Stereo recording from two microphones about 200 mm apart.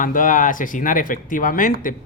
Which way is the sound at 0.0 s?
40° left (ahead or behind).